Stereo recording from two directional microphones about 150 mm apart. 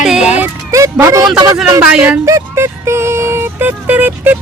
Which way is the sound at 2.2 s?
20° right (ahead or behind).